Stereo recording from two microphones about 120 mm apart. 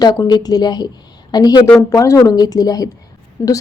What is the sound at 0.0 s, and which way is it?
A woman's voice, 35° left (ahead or behind).